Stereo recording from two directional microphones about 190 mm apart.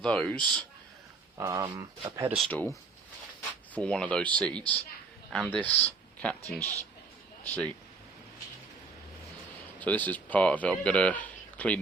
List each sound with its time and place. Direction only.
0.0 s speech: 5° left (ahead or behind)
1.4 s speech: 20° right (ahead or behind)
2.3 s speech: 5° left (ahead or behind)
3.8 s speech: 5° left (ahead or behind)
9.8 s speech: 10° left (ahead or behind)